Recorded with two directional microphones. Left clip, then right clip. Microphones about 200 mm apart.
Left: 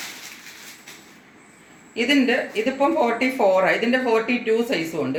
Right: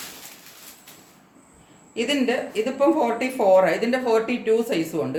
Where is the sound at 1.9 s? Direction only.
20° right (ahead or behind).